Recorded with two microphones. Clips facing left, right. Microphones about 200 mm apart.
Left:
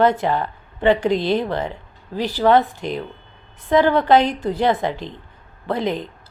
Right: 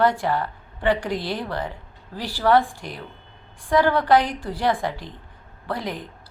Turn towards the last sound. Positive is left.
turn(degrees=25)  # may be behind; listen again after turning